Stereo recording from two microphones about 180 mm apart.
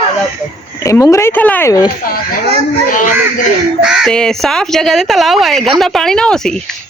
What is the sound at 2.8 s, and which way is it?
Speech, 50° left (ahead or behind).